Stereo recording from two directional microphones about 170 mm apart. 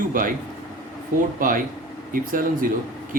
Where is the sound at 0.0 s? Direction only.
55° right (ahead or behind).